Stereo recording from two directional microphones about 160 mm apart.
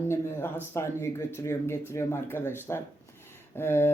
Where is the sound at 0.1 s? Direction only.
15° left (ahead or behind).